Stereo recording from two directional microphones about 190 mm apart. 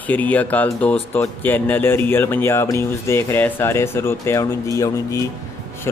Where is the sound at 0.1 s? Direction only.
10° left (ahead or behind).